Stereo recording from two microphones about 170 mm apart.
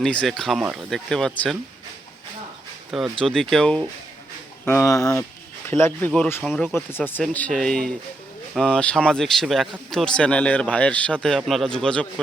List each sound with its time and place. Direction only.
0.0 s speech: 5° left (ahead or behind)
2.9 s speech: centre (ahead or behind)
6.4 s speech: centre (ahead or behind)
6.7 s speech: 10° left (ahead or behind)